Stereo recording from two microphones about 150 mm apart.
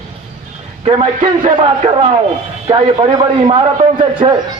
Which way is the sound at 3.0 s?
30° right (ahead or behind).